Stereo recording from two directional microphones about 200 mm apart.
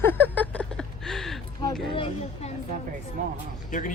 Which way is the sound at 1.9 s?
25° left (ahead or behind).